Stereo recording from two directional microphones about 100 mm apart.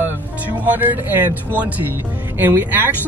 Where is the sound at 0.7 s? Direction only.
20° right (ahead or behind).